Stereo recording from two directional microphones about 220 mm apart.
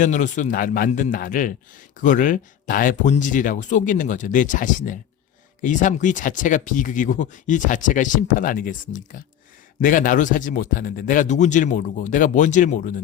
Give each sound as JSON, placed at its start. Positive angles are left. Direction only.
{"t": 0.0, "sound": "speech", "side_deg": 35}